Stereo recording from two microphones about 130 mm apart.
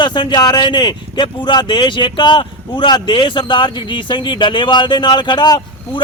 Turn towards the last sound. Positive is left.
turn(degrees=35)  # may be behind; listen again after turning